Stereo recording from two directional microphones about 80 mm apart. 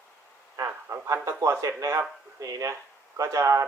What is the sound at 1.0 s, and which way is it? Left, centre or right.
Speech, right.